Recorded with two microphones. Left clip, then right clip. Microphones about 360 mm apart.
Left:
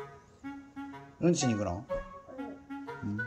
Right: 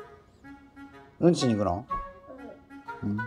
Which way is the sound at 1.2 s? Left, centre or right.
Centre.